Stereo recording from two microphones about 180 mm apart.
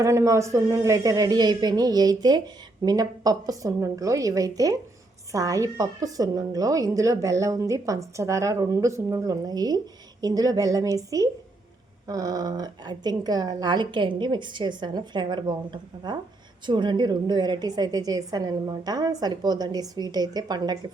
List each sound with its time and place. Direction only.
0.0 s speech: 15° right (ahead or behind)